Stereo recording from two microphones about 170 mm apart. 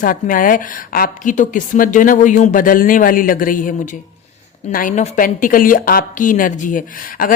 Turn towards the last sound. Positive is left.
turn(degrees=55)  # may be behind; listen again after turning